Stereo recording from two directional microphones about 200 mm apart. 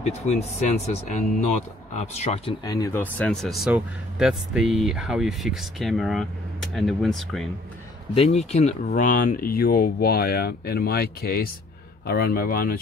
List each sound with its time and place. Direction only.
0.0 s speech: 35° left (ahead or behind)
2.6 s speech: 20° left (ahead or behind); by 7.4 s centre (ahead or behind)
8.1 s speech: 30° left (ahead or behind); by 12.8 s 45° left (ahead or behind)